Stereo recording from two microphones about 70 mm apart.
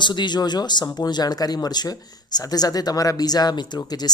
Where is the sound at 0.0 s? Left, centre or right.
Left.